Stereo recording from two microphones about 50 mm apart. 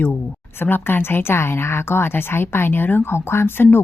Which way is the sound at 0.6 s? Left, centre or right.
Left.